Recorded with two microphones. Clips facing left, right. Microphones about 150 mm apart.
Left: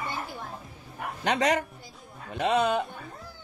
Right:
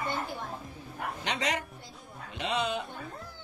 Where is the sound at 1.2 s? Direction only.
50° left (ahead or behind).